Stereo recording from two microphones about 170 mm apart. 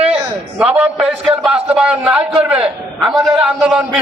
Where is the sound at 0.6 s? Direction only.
5° right (ahead or behind).